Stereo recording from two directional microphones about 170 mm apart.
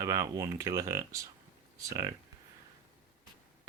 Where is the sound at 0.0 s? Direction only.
20° right (ahead or behind).